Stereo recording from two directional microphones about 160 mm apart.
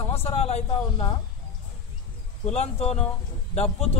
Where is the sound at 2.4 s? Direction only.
40° left (ahead or behind).